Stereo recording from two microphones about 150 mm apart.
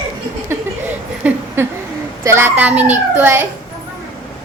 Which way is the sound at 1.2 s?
10° right (ahead or behind).